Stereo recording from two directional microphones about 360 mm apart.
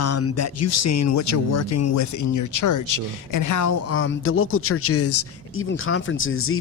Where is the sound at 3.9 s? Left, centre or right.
Left.